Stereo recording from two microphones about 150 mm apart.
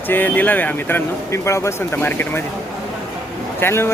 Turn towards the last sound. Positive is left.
turn(degrees=15)  # may be behind; listen again after turning